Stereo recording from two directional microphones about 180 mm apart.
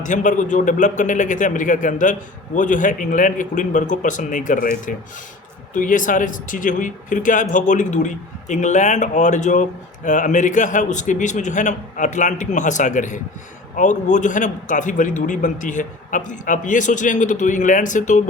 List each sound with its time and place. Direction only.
0.0 s speech: 45° left (ahead or behind)